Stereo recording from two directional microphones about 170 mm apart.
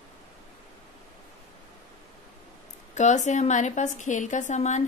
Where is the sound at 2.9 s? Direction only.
45° left (ahead or behind).